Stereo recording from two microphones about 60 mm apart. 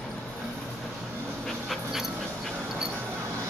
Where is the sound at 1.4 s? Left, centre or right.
Centre.